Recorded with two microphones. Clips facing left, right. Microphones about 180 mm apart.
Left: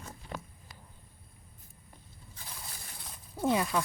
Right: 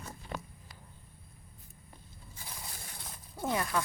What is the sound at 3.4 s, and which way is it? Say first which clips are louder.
Speech: left 4 dB; 15° left (ahead or behind).